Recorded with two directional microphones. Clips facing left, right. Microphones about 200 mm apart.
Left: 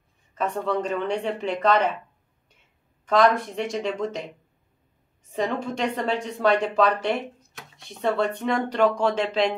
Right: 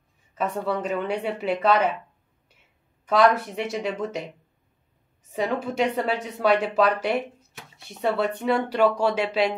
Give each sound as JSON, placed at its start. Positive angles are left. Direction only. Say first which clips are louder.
{"t": 0.3, "sound": "a woman's voice", "louder": "left 1 dB", "side_deg": -5}
{"t": 3.1, "sound": "a woman's voice", "louder": "even", "side_deg": -10}
{"t": 5.3, "sound": "a woman's voice", "louder": "even", "side_deg": -5}